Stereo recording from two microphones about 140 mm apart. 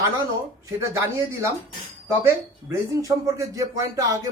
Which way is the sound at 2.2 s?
20° right (ahead or behind).